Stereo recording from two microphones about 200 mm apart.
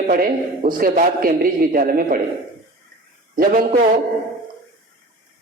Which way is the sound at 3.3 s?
45° right (ahead or behind).